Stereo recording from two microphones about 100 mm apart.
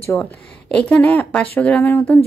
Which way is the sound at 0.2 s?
10° left (ahead or behind).